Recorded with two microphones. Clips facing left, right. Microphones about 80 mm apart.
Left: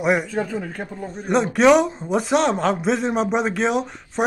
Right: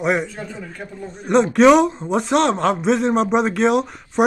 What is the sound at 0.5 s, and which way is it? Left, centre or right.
Speech, left.